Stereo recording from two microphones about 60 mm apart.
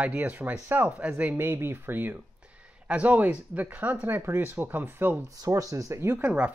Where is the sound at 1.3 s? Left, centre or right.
Right.